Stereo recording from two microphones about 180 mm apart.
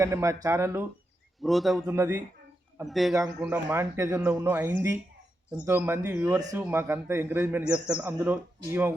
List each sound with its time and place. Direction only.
0.0 s a man's voice: 15° right (ahead or behind)
1.4 s a man's voice: centre (ahead or behind)
1.9 s a man's voice: 15° right (ahead or behind)
2.8 s a man's voice: centre (ahead or behind)
3.2 s a man's voice: 10° right (ahead or behind)